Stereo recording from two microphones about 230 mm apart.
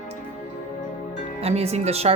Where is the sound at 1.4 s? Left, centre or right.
Right.